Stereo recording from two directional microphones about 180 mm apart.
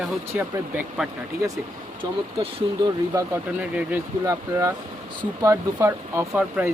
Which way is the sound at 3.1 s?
15° right (ahead or behind).